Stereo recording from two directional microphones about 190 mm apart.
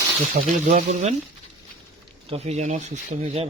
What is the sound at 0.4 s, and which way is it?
Speech, 45° right (ahead or behind).